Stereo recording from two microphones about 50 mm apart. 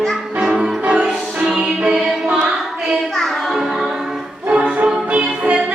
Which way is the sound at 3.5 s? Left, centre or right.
Centre.